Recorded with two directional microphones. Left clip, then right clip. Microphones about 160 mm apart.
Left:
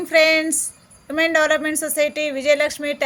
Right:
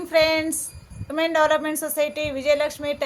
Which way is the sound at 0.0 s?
25° left (ahead or behind).